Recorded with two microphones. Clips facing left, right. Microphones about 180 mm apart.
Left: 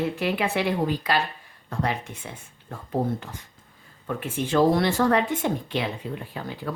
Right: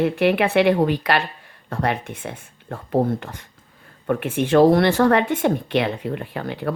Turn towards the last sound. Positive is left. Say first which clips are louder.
# right 6 dB
turn(degrees=-65)  # may be behind; listen again after turning